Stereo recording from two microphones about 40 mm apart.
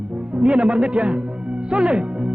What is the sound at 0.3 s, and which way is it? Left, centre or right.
Speech, right.